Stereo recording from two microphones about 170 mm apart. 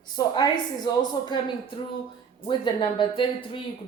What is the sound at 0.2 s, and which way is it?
Speech, 20° left (ahead or behind).